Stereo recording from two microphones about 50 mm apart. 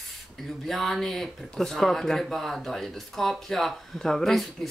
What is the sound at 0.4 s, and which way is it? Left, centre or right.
Speech, centre.